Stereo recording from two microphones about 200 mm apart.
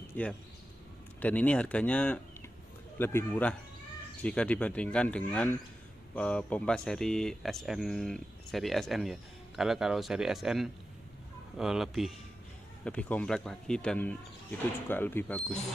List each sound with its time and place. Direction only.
0.1 s speech: 5° left (ahead or behind)